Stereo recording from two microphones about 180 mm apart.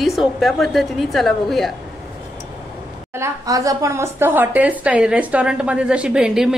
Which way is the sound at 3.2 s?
20° right (ahead or behind).